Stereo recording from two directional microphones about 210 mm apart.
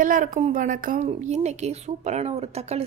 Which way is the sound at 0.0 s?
40° right (ahead or behind).